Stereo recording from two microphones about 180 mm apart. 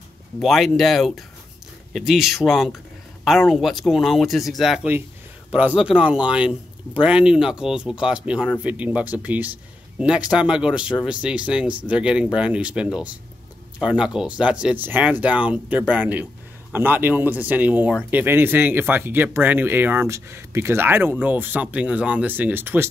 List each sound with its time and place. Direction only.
0.4 s speech: centre (ahead or behind)